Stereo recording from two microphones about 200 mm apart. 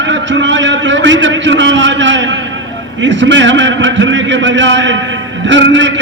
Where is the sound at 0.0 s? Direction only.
65° right (ahead or behind).